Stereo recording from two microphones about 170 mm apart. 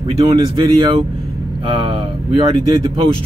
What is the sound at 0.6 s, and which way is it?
Speech, 30° right (ahead or behind).